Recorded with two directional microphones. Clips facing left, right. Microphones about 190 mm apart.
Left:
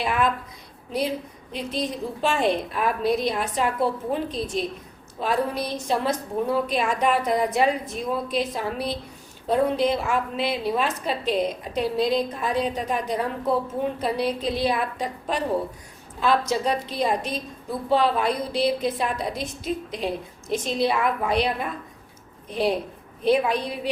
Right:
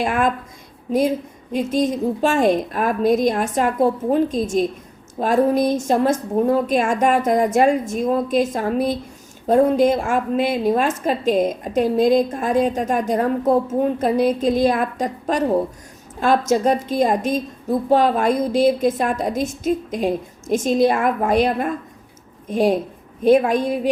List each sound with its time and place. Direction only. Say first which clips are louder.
0.0 s a woman's voice: right 4 dB; 45° right (ahead or behind)
1.5 s a woman's voice: right 9 dB; 45° right (ahead or behind)